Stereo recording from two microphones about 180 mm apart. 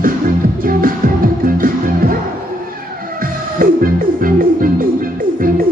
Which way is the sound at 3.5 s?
50° right (ahead or behind).